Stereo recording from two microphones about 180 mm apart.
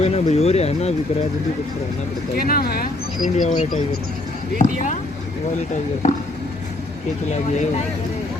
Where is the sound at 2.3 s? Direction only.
55° left (ahead or behind).